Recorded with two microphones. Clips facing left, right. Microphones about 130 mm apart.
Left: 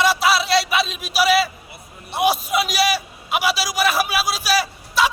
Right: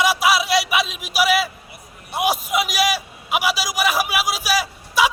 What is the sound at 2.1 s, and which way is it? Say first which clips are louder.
A man's voice: left 2 dB; 15° right (ahead or behind).